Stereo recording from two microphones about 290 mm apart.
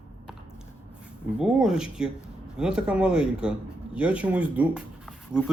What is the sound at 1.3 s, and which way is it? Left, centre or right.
A man's voice, centre.